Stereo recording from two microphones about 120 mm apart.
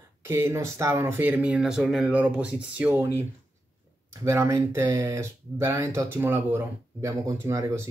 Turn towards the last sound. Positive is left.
turn(degrees=-25)  # may be behind; listen again after turning